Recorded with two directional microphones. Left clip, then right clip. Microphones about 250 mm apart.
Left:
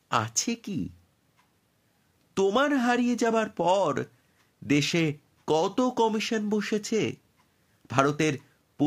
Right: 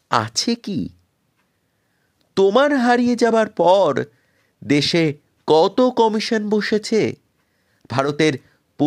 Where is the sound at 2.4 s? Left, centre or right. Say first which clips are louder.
Right 9 dB; right.